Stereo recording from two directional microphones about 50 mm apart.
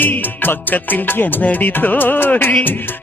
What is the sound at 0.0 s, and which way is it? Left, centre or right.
Music, left.